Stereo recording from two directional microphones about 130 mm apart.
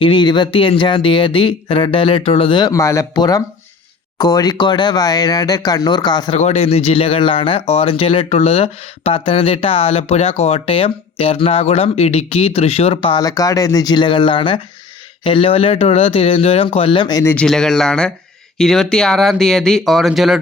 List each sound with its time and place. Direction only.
0.0 s speech: 35° left (ahead or behind)
6.3 s speech: 50° left (ahead or behind)
13.2 s speech: 25° left (ahead or behind)
17.3 s speech: 5° left (ahead or behind)